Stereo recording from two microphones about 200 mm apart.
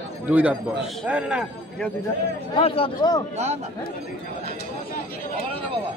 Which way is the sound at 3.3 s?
35° right (ahead or behind).